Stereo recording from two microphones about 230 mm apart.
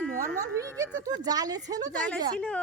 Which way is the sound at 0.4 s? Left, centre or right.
Centre.